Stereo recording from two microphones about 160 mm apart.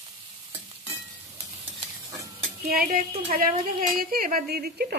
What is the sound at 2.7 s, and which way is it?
A woman's voice, 65° right (ahead or behind).